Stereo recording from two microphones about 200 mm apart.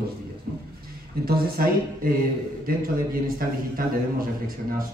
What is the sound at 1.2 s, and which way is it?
A man's voice, 50° right (ahead or behind).